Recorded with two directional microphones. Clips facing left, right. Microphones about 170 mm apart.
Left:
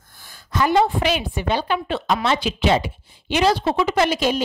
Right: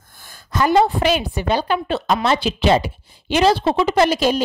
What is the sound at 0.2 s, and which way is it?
A woman's voice, 45° right (ahead or behind).